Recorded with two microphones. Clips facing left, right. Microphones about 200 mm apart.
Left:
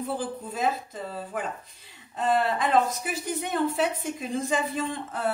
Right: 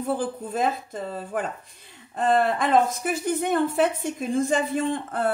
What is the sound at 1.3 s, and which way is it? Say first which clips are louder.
Speech: right 4 dB; 50° right (ahead or behind).